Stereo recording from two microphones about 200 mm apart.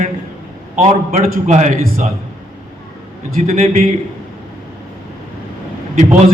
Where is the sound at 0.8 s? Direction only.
35° right (ahead or behind).